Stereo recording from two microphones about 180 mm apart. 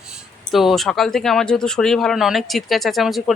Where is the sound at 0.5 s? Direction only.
Centre (ahead or behind).